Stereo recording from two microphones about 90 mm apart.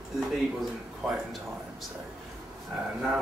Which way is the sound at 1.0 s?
Centre (ahead or behind).